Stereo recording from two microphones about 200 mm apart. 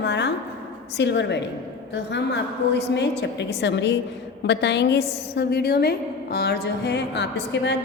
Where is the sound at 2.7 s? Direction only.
55° left (ahead or behind).